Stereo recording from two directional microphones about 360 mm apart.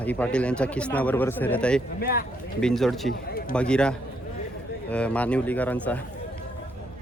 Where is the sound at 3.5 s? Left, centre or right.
Centre.